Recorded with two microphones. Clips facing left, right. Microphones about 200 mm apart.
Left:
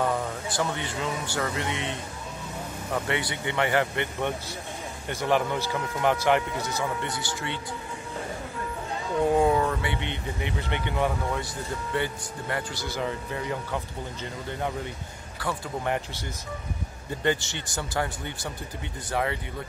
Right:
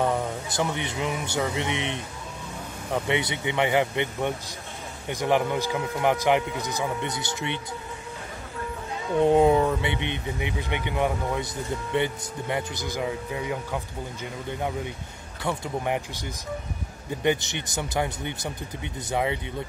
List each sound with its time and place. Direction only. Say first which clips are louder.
0.0 s speech: right 2 dB; 20° right (ahead or behind)
9.2 s speech: right 3 dB; 20° right (ahead or behind)
15.4 s speech: right 2 dB; 20° right (ahead or behind)